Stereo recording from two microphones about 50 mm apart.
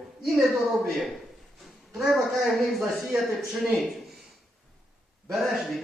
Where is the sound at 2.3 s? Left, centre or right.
Centre.